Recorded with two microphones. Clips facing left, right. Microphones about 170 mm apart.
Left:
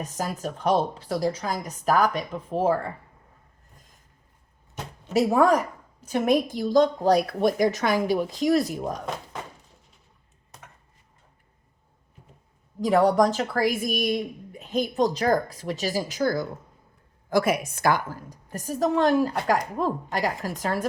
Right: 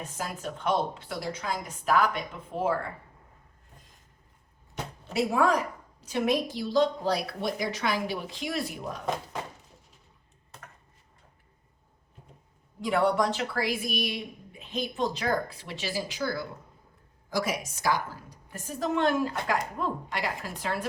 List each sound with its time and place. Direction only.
0.0 s a woman's voice: 40° left (ahead or behind)
5.1 s a woman's voice: 40° left (ahead or behind)
12.8 s a woman's voice: 40° left (ahead or behind)
17.2 s a woman's voice: 55° left (ahead or behind)